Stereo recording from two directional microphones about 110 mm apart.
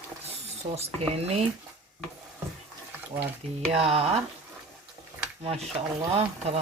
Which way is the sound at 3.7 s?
65° right (ahead or behind).